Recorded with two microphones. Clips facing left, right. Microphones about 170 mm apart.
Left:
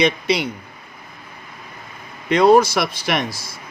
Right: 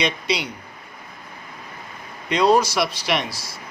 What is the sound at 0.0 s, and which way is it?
Speech, 55° left (ahead or behind).